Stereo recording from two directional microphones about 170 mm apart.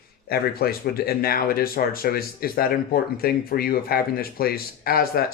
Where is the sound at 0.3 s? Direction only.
65° left (ahead or behind).